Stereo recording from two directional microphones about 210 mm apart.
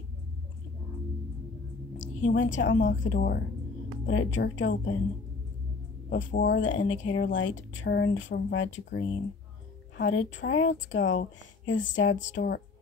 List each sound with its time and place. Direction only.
2.0 s a woman's voice: 60° left (ahead or behind)
4.0 s speech: 65° left (ahead or behind)
6.4 s speech: 60° left (ahead or behind)